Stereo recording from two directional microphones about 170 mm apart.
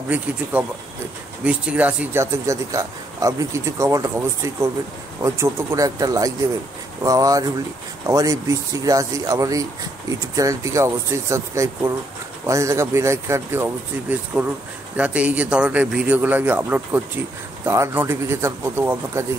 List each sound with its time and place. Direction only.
0.1 s speech: 10° right (ahead or behind)